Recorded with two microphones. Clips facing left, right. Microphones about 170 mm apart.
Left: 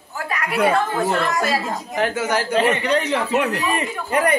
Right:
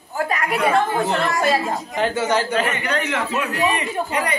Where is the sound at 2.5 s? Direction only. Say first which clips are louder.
Left 4 dB; 30° left (ahead or behind).